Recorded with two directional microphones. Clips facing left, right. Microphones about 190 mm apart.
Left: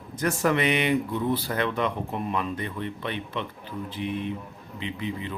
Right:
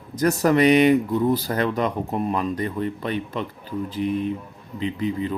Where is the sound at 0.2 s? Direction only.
40° right (ahead or behind).